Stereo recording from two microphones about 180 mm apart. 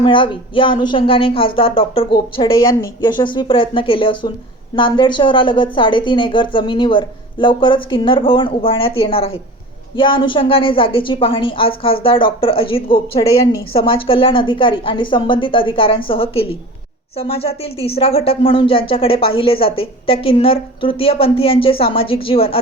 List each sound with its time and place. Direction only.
0.0 s a woman's voice: 30° left (ahead or behind)